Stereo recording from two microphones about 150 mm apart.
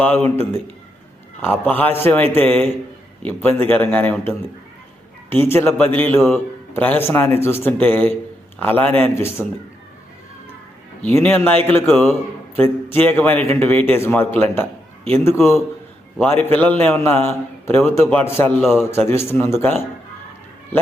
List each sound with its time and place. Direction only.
0.0 s a man's voice: 15° left (ahead or behind)
11.1 s a man's voice: 15° left (ahead or behind)